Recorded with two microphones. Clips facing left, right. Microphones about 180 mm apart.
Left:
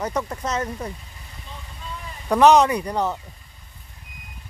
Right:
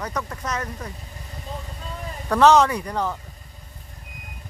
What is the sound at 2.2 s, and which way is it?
Speech, 15° left (ahead or behind).